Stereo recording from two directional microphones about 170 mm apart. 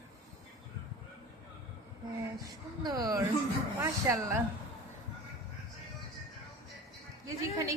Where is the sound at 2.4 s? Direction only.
20° right (ahead or behind).